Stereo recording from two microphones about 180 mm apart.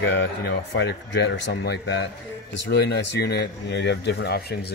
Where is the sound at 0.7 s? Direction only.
85° left; by 4.7 s 65° left (ahead or behind).